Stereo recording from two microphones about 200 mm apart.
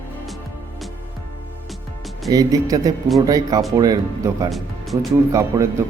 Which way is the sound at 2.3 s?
20° right (ahead or behind).